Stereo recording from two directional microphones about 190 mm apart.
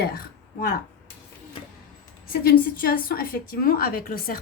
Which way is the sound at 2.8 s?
50° left (ahead or behind).